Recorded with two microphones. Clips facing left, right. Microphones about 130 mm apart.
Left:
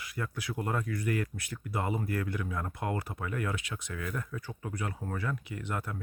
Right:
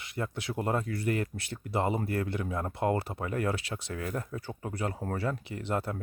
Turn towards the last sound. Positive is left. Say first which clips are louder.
# right 5 dB
turn(degrees=-30)  # may be behind; listen again after turning